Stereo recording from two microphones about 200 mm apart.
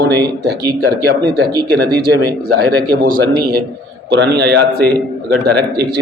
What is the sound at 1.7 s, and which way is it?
Speech, 55° right (ahead or behind).